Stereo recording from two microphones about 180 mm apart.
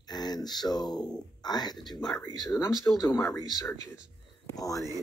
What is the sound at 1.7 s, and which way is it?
Speech, centre (ahead or behind).